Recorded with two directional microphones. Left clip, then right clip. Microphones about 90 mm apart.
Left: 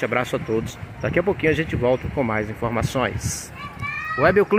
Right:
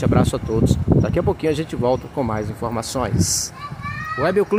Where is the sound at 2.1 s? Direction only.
15° right (ahead or behind).